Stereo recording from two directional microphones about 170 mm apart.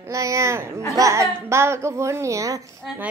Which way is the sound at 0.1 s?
20° right (ahead or behind).